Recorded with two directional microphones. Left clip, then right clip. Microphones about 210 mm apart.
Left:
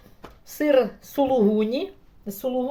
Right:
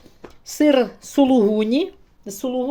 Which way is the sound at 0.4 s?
50° right (ahead or behind).